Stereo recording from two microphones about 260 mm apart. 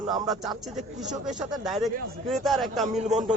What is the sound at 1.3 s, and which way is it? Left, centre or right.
A man's voice, centre.